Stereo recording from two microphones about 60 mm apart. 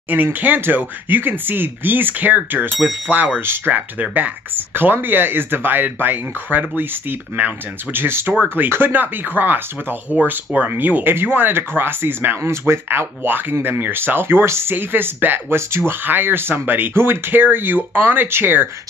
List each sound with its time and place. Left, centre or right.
0.1 s speech: right
3.7 s speech: right
8.3 s speech: right
8.6 s speech: right